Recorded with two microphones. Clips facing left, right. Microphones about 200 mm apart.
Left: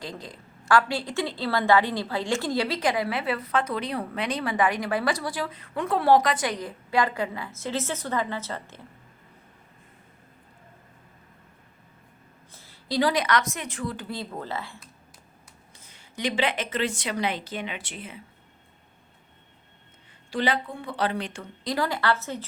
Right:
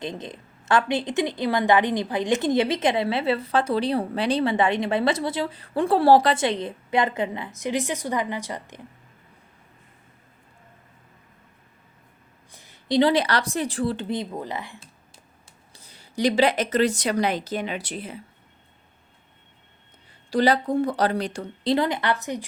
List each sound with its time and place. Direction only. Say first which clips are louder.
0.0 s a woman's voice: right 5 dB; 20° right (ahead or behind)
12.5 s a woman's voice: right 6 dB; 15° right (ahead or behind)
15.7 s a woman's voice: right 8 dB; 35° right (ahead or behind)
20.3 s a woman's voice: right 7 dB; 40° right (ahead or behind); by 22.4 s 15° right (ahead or behind)